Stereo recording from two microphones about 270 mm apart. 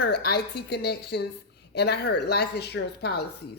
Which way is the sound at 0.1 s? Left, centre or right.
Left.